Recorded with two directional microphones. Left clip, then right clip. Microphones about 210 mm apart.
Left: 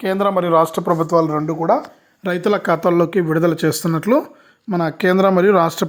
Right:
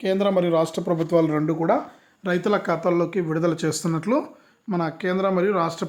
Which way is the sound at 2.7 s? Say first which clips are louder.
Left 6 dB; 35° left (ahead or behind).